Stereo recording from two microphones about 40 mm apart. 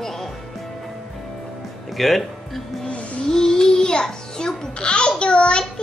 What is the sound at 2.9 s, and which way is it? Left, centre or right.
Music, left.